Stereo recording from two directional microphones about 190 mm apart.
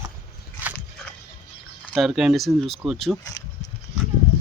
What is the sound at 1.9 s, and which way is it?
Speech, centre (ahead or behind).